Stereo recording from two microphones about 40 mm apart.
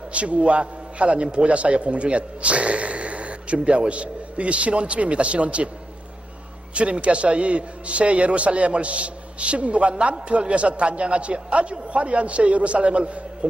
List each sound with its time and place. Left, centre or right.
0.1 s a man's voice: right
6.7 s a man's voice: right